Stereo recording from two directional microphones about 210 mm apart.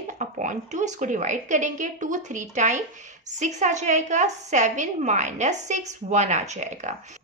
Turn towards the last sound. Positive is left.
turn(degrees=-35)  # may be behind; listen again after turning